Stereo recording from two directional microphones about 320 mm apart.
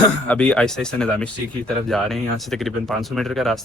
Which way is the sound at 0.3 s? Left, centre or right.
Centre.